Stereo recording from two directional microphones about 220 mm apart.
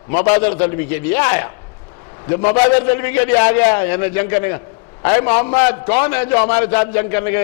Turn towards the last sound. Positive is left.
turn(degrees=15)  # may be behind; listen again after turning